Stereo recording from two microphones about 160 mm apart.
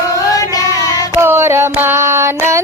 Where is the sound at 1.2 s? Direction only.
15° right (ahead or behind).